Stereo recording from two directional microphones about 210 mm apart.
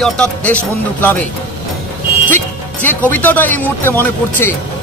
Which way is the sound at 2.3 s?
10° left (ahead or behind).